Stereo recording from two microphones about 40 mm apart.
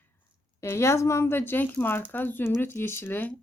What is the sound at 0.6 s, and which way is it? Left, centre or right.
Speech, left.